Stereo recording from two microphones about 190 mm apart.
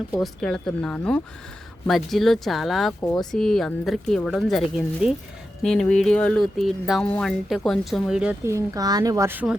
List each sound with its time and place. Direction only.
0.2 s speech: 5° left (ahead or behind)
3.0 s speech: 15° left (ahead or behind)
3.3 s speech: centre (ahead or behind)